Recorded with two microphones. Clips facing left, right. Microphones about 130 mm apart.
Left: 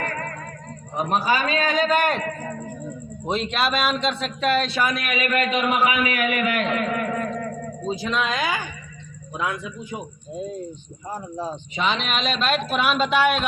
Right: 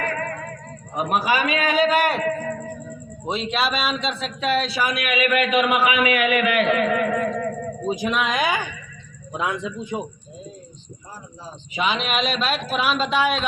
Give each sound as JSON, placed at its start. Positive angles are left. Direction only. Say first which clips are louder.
{"t": 0.9, "sound": "speech", "louder": "right 1 dB", "side_deg": -15}
{"t": 3.2, "sound": "speech", "louder": "even", "side_deg": 0}
{"t": 4.9, "sound": "a man's voice", "louder": "right 3 dB", "side_deg": 40}
{"t": 7.9, "sound": "a man's voice", "louder": "right 1 dB", "side_deg": -15}
{"t": 11.1, "sound": "speech", "louder": "left 10 dB", "side_deg": 60}
{"t": 11.8, "sound": "speech", "louder": "right 2 dB", "side_deg": -5}